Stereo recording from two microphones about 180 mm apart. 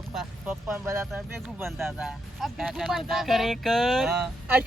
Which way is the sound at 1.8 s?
Centre (ahead or behind).